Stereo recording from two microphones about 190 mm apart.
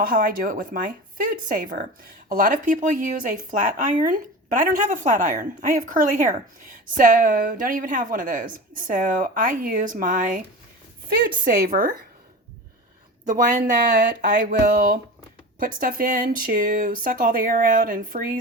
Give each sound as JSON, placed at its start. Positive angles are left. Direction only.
{"t": 0.0, "sound": "speech", "side_deg": -50}
{"t": 13.2, "sound": "speech", "side_deg": -45}